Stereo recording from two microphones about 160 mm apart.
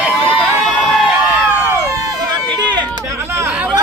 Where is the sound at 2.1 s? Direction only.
25° right (ahead or behind).